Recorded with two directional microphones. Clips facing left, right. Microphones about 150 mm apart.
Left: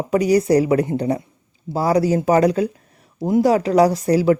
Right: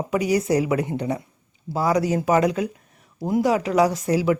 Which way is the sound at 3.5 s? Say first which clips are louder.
Left 4 dB; 35° left (ahead or behind).